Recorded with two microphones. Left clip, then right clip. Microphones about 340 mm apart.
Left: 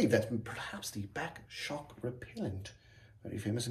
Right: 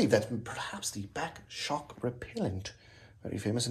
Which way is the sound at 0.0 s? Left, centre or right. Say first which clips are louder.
Right 3 dB; centre.